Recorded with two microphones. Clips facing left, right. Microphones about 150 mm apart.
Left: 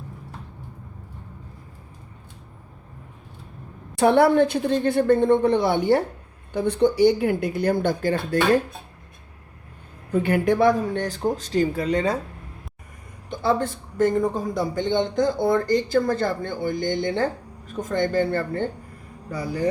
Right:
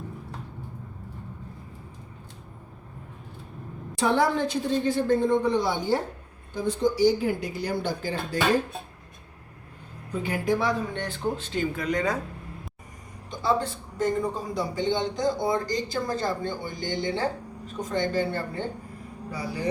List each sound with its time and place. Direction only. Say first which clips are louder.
3.9 s speech: left 7 dB; 60° left (ahead or behind)
10.1 s speech: left 6 dB; 60° left (ahead or behind); by 12.2 s 30° left (ahead or behind)
13.4 s speech: left 3 dB; 55° left (ahead or behind)